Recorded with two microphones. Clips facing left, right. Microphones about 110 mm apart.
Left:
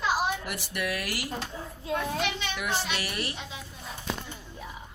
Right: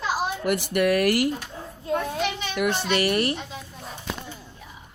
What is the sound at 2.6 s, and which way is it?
A child's voice, 55° right (ahead or behind).